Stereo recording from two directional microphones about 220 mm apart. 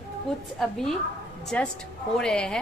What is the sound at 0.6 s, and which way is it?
Speech, centre (ahead or behind).